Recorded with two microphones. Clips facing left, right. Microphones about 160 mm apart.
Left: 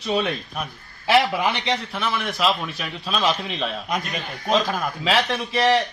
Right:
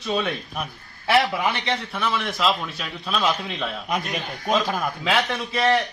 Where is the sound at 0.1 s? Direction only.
20° left (ahead or behind).